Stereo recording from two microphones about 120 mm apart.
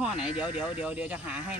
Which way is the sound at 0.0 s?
5° right (ahead or behind).